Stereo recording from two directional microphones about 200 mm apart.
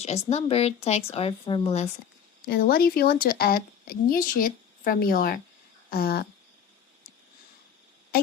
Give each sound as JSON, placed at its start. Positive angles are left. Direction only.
{"t": 0.0, "sound": "speech", "side_deg": 35}
{"t": 2.5, "sound": "speech", "side_deg": 50}